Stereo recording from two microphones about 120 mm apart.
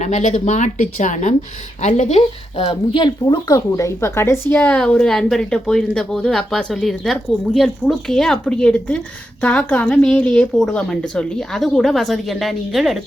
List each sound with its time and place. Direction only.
0.0 s a woman's voice: 85° left; by 13.0 s centre (ahead or behind)